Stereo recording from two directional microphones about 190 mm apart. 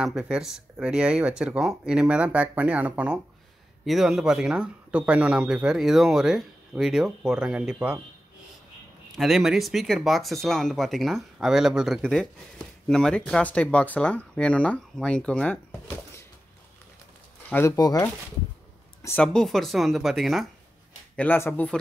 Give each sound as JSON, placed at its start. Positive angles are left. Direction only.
{"t": 0.0, "sound": "speech", "side_deg": -5}
{"t": 9.1, "sound": "speech", "side_deg": 0}
{"t": 17.5, "sound": "speech", "side_deg": 15}
{"t": 19.0, "sound": "speech", "side_deg": 5}
{"t": 21.2, "sound": "speech", "side_deg": 10}